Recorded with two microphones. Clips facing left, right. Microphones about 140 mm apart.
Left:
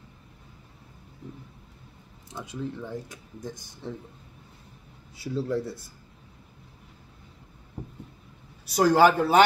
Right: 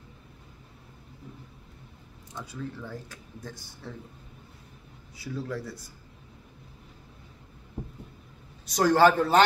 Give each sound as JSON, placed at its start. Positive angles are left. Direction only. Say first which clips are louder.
{"t": 2.4, "sound": "speech", "louder": "left 4 dB", "side_deg": 20}
{"t": 5.1, "sound": "speech", "louder": "left 6 dB", "side_deg": 25}
{"t": 8.6, "sound": "a man's voice", "louder": "left 1 dB", "side_deg": 10}